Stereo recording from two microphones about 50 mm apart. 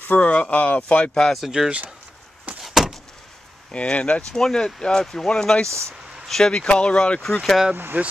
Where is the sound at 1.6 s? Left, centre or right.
Centre.